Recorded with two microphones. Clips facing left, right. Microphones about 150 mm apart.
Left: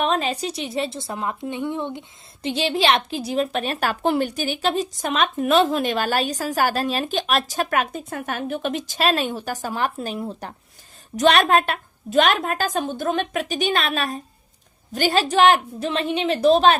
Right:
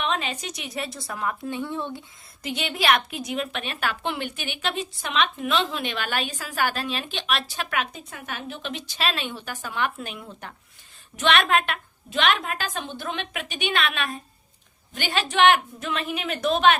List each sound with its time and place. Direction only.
0.0 s a woman's voice: 35° left (ahead or behind)